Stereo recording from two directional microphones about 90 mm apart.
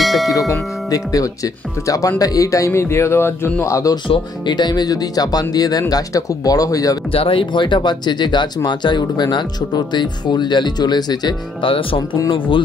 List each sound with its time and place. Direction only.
0.0 s tubular bells: centre (ahead or behind)
0.3 s speech: 40° left (ahead or behind); by 3.6 s 25° left (ahead or behind)
3.6 s speech: 35° left (ahead or behind)
4.1 s speech: 55° left (ahead or behind)
7.1 s speech: 85° left; by 11.3 s 50° left (ahead or behind)
11.6 s speech: 75° left (ahead or behind)